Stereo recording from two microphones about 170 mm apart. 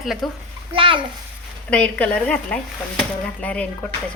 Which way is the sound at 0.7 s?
30° right (ahead or behind).